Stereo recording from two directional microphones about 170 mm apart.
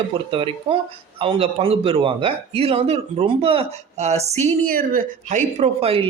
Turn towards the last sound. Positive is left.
turn(degrees=-35)  # may be behind; listen again after turning